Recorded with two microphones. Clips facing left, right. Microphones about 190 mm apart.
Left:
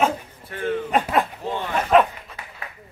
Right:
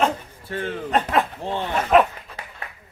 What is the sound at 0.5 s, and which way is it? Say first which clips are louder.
Speech: left 2 dB; 30° right (ahead or behind).